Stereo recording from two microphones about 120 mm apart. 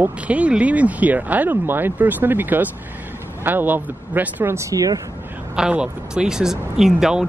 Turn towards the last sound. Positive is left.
turn(degrees=-5)  # may be behind; listen again after turning